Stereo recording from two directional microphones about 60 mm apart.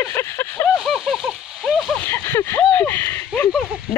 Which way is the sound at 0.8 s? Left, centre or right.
Centre.